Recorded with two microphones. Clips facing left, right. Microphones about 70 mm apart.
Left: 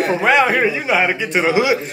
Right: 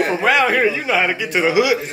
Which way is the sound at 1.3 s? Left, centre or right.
Left.